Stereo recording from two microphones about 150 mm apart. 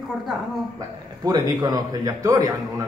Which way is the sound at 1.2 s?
25° right (ahead or behind).